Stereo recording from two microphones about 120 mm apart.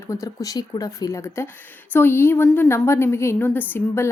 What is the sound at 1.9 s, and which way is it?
A woman's voice, 20° left (ahead or behind).